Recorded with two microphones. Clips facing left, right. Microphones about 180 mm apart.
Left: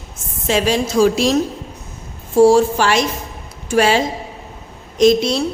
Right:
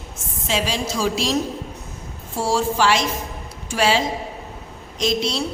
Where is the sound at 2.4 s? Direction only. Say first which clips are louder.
Left 8 dB; 50° left (ahead or behind).